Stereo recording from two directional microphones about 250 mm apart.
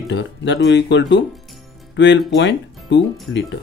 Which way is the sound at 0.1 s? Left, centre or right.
Left.